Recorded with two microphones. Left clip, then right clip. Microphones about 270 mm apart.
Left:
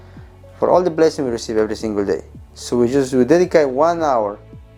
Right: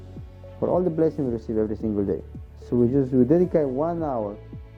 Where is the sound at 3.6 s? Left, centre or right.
Centre.